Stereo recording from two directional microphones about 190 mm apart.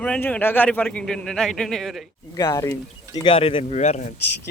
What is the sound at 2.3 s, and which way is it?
Speech, 15° left (ahead or behind).